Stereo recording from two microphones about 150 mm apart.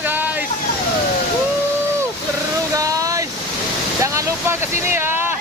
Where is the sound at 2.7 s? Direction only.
20° right (ahead or behind).